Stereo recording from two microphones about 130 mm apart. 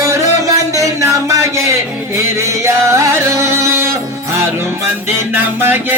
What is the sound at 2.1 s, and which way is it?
Music, 20° right (ahead or behind).